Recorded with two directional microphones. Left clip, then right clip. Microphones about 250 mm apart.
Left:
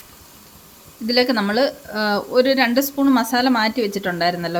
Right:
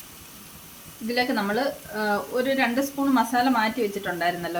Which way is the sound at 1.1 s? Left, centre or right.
Left.